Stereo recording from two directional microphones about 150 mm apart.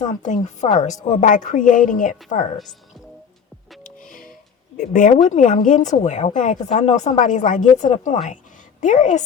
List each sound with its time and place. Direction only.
0.0 s speech: 55° left (ahead or behind)
3.8 s music: 65° left (ahead or behind)
4.8 s speech: 65° left (ahead or behind)